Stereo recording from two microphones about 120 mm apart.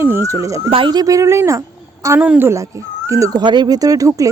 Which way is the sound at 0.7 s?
40° right (ahead or behind).